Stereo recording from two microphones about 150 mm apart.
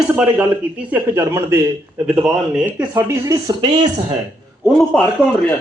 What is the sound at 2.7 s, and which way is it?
Speech, 15° right (ahead or behind).